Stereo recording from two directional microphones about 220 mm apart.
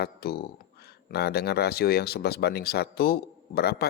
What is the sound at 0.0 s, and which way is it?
Speech, 45° left (ahead or behind).